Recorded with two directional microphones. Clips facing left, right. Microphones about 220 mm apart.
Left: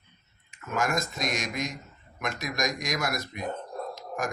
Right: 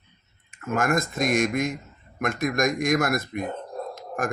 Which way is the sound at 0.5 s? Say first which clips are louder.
Right 5 dB; 50° right (ahead or behind).